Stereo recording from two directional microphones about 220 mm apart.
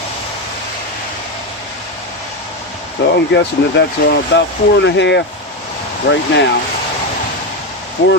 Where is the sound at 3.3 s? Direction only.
55° left (ahead or behind).